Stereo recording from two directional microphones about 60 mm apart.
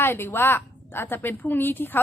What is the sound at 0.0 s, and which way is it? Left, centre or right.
A woman's voice, left.